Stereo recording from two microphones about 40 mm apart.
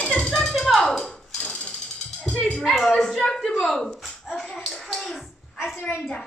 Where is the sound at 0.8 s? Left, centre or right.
Centre.